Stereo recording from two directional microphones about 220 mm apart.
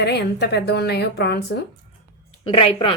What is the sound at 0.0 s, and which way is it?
A woman's voice, 50° left (ahead or behind).